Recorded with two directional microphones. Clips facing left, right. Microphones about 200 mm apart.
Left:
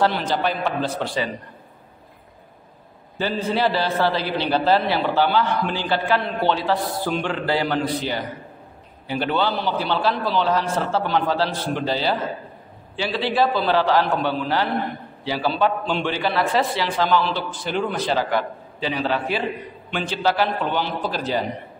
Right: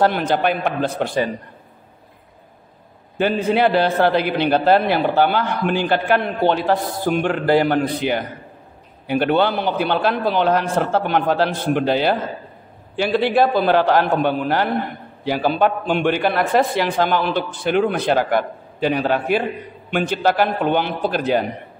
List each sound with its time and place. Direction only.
0.0 s a man's voice: 55° right (ahead or behind)
3.2 s a man's voice: 60° right (ahead or behind)